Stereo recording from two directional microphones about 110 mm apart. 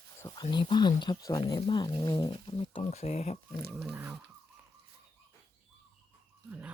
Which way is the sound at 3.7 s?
Centre (ahead or behind).